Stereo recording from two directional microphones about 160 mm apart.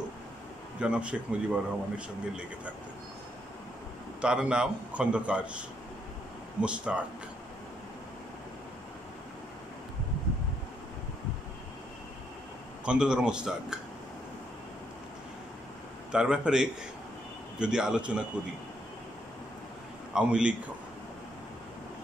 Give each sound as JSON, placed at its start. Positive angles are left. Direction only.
{"t": 0.7, "sound": "speech", "side_deg": -5}
{"t": 4.2, "sound": "speech", "side_deg": -5}
{"t": 6.6, "sound": "speech", "side_deg": -5}
{"t": 12.8, "sound": "speech", "side_deg": -5}
{"t": 16.1, "sound": "speech", "side_deg": -5}
{"t": 20.2, "sound": "speech", "side_deg": -5}